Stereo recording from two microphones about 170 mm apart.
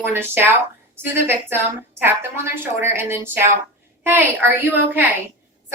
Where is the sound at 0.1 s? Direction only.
15° right (ahead or behind).